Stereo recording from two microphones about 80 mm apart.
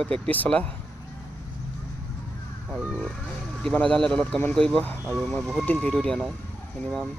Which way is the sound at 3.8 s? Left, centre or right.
Centre.